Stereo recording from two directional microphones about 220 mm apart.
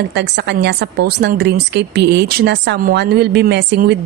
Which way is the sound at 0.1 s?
50° right (ahead or behind).